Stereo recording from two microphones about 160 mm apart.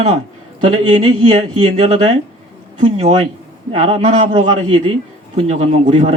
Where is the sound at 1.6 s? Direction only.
40° right (ahead or behind).